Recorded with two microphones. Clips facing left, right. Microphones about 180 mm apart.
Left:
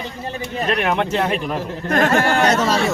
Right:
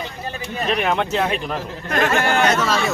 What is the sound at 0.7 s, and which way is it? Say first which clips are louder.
Speech: even; 5° left (ahead or behind).